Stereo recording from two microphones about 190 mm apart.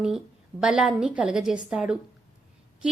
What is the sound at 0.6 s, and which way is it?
A woman's voice, 5° right (ahead or behind).